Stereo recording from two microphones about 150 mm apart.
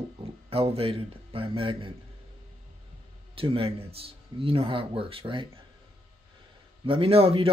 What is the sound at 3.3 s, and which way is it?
A man's voice, 35° right (ahead or behind).